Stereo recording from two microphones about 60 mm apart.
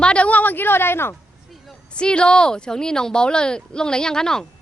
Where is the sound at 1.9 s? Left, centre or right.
Centre.